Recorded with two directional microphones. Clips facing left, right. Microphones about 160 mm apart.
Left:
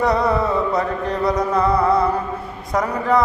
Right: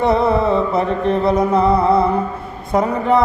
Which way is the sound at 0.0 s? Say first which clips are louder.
Right 3 dB; 25° right (ahead or behind).